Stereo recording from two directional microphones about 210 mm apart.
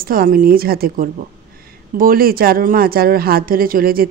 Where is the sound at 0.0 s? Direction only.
45° right (ahead or behind).